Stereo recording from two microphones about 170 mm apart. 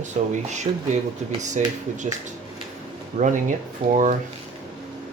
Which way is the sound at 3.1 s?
45° right (ahead or behind).